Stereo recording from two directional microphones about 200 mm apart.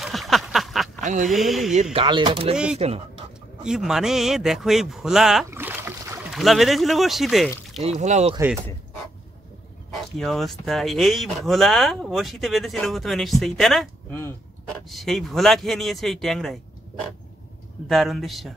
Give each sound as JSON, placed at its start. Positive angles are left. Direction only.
{"t": 0.0, "sound": "a sound", "side_deg": 0}
{"t": 1.0, "sound": "speech", "side_deg": -40}
{"t": 1.3, "sound": "speech", "side_deg": 0}
{"t": 1.7, "sound": "speech", "side_deg": -35}
{"t": 2.5, "sound": "speech", "side_deg": -5}
{"t": 5.5, "sound": "boat", "side_deg": -10}
{"t": 6.3, "sound": "speech", "side_deg": 0}
{"t": 7.8, "sound": "speech", "side_deg": -35}
{"t": 9.9, "sound": "speech", "side_deg": 0}
{"t": 14.9, "sound": "speech", "side_deg": 0}
{"t": 17.8, "sound": "speech", "side_deg": 0}